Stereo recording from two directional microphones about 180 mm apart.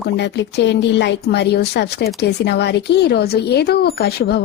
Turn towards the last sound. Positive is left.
turn(degrees=60)  # may be behind; listen again after turning